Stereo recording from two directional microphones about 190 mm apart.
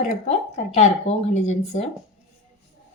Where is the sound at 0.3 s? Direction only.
35° left (ahead or behind).